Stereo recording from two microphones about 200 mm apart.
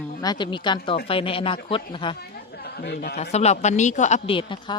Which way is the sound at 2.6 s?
55° left (ahead or behind).